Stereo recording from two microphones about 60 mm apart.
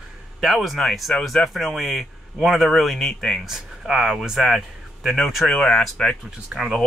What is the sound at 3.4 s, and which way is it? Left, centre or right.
Speech, centre.